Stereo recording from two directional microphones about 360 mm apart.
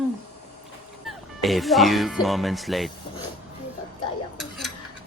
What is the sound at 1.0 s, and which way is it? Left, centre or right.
Speech, centre.